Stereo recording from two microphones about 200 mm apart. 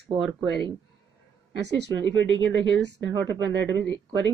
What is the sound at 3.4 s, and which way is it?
Speech, 60° right (ahead or behind).